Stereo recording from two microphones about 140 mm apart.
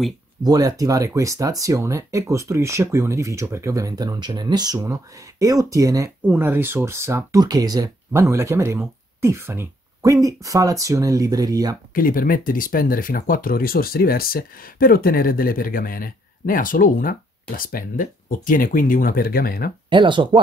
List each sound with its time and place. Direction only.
0.4 s speech: 25° right (ahead or behind)
11.9 s speech: 90° left
19.9 s speech: 35° right (ahead or behind)